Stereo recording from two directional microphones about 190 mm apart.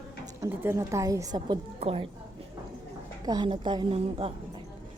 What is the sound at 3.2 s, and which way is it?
A woman's voice, 20° right (ahead or behind).